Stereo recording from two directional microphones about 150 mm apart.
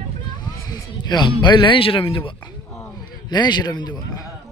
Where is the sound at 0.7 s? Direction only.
25° left (ahead or behind).